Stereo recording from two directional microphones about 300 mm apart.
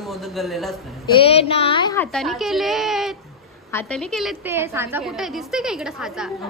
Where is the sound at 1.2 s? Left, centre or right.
Centre.